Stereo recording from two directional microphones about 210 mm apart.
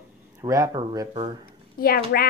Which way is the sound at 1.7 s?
45° left (ahead or behind).